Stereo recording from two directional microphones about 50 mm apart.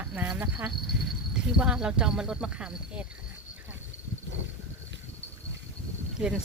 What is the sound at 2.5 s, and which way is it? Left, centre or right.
Speech, right.